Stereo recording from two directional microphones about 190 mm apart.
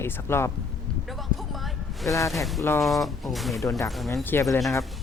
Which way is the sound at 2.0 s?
15° left (ahead or behind).